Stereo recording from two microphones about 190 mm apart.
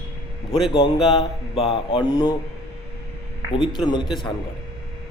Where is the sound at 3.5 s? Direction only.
25° left (ahead or behind).